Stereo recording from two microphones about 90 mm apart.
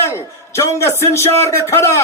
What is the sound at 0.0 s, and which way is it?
A man's voice, 30° left (ahead or behind).